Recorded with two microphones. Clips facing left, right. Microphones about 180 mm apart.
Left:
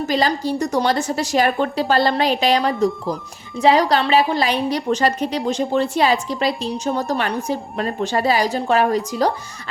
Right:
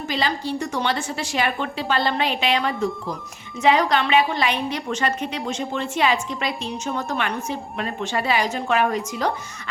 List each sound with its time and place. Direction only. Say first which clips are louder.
0.0 s a woman's voice: left 5 dB; 40° left (ahead or behind)